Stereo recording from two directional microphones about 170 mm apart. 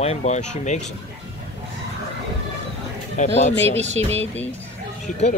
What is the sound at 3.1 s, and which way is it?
Speech, 40° left (ahead or behind).